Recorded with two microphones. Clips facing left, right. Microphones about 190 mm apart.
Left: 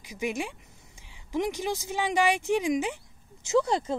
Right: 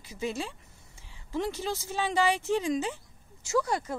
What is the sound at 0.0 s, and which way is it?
A woman's voice, 15° left (ahead or behind).